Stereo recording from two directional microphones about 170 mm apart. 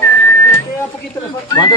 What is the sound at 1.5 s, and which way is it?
Speech, 25° left (ahead or behind).